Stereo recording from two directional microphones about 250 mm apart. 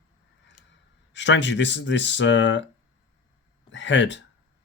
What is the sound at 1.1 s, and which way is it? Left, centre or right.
Speech, left.